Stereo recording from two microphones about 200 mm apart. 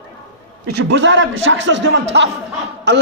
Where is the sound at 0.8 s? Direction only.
70° right (ahead or behind).